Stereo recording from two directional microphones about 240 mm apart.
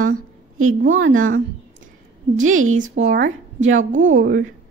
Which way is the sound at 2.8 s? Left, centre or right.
Right.